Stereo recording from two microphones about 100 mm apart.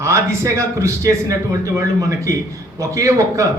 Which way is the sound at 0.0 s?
30° right (ahead or behind).